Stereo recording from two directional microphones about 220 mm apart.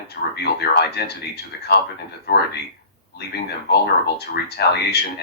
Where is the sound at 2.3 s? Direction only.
45° left (ahead or behind).